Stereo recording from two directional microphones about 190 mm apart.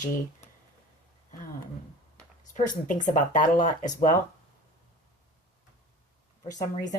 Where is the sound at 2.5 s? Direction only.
40° left (ahead or behind).